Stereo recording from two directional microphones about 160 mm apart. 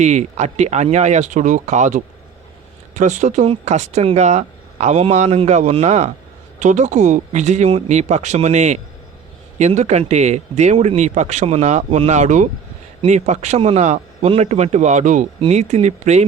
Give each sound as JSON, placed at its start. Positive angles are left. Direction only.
{"t": 0.0, "sound": "speech", "side_deg": -45}